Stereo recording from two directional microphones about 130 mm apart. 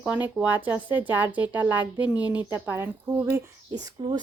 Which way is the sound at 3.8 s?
35° right (ahead or behind).